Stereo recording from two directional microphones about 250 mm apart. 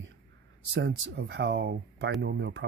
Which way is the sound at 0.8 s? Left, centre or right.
Right.